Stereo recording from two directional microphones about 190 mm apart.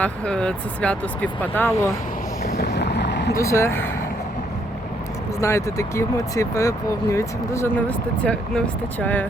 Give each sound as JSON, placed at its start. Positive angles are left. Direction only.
{"t": 0.0, "sound": "speech", "side_deg": 5}
{"t": 2.4, "sound": "boat", "side_deg": 55}
{"t": 3.3, "sound": "speech", "side_deg": 15}
{"t": 5.4, "sound": "speech", "side_deg": 15}